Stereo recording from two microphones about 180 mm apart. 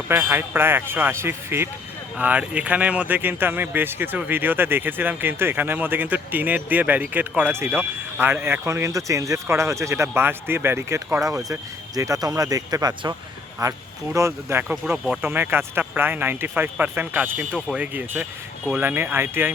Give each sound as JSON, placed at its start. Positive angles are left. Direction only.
{"t": 0.1, "sound": "speech", "side_deg": -10}
{"t": 14.8, "sound": "speech", "side_deg": 0}
{"t": 15.3, "sound": "speech", "side_deg": -10}